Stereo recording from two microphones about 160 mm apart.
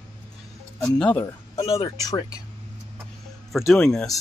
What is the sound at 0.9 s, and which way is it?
Speech, 10° left (ahead or behind).